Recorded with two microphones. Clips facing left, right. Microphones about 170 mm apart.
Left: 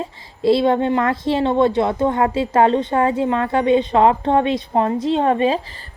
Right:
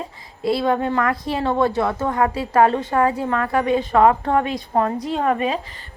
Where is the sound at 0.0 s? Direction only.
25° left (ahead or behind).